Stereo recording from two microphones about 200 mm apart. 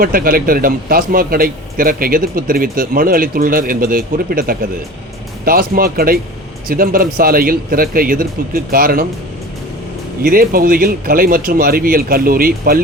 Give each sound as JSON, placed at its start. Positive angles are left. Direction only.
{"t": 0.0, "sound": "a man's voice", "side_deg": -45}
{"t": 10.2, "sound": "a man's voice", "side_deg": -45}